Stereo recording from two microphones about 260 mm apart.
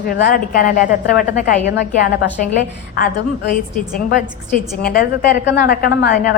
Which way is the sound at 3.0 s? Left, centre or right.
Left.